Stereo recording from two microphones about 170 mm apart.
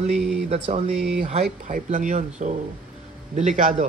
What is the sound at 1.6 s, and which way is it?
Speech, 45° right (ahead or behind).